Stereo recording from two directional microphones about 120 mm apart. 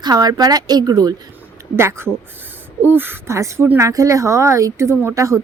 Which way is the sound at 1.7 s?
20° right (ahead or behind).